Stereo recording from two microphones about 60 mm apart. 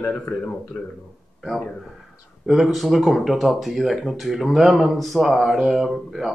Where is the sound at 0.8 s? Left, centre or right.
Left.